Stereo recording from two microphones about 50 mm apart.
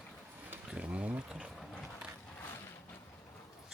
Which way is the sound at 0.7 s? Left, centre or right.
Right.